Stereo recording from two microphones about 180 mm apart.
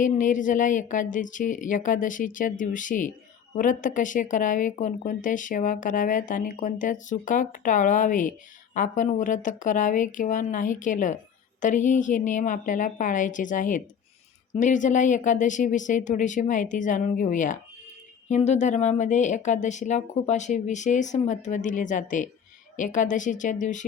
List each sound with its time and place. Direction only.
0.0 s speech: 45° left (ahead or behind)